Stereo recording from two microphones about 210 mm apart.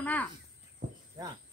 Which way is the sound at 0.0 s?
10° left (ahead or behind).